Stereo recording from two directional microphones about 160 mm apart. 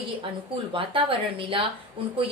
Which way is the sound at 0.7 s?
35° right (ahead or behind).